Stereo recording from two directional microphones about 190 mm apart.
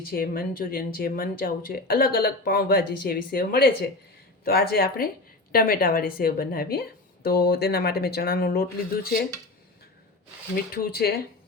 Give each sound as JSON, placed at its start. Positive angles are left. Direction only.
{"t": 0.0, "sound": "speech", "side_deg": 50}
{"t": 10.5, "sound": "speech", "side_deg": 50}